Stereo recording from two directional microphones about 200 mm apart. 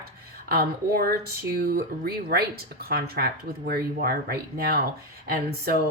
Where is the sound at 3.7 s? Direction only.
50° right (ahead or behind).